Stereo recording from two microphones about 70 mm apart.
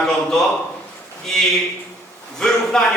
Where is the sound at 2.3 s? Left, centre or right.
Centre.